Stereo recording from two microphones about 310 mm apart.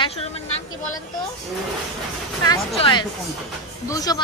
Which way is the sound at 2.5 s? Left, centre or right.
Centre.